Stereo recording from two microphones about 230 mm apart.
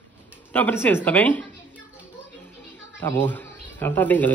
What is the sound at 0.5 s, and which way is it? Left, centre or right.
Speech, centre.